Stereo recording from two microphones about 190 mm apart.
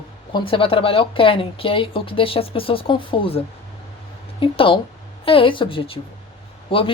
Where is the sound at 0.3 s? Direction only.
25° left (ahead or behind).